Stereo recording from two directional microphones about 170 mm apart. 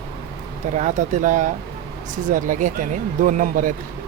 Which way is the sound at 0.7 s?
45° right (ahead or behind).